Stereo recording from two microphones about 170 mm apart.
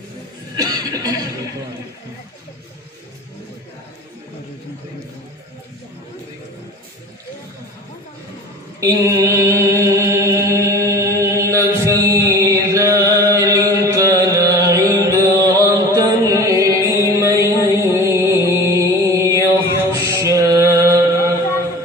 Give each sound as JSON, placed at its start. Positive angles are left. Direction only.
{"t": 0.5, "sound": "chuckle", "side_deg": -20}
{"t": 8.8, "sound": "mantra", "side_deg": -20}